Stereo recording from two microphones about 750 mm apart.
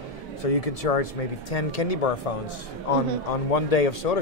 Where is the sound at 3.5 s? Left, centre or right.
Left.